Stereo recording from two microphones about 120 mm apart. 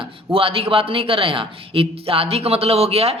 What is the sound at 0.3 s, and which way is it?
A man's voice, 50° right (ahead or behind).